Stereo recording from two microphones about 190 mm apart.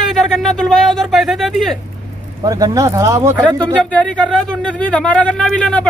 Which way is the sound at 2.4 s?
20° right (ahead or behind).